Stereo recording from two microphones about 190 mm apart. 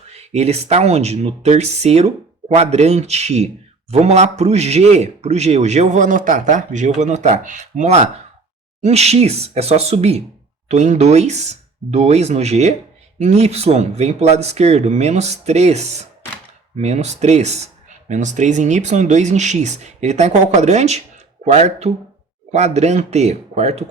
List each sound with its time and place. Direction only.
0.1 s speech: 35° right (ahead or behind)